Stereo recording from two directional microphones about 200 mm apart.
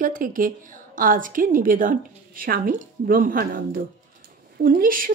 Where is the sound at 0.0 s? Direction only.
40° right (ahead or behind).